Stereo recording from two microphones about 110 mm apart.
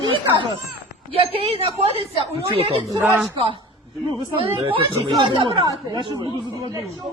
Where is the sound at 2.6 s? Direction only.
60° right (ahead or behind).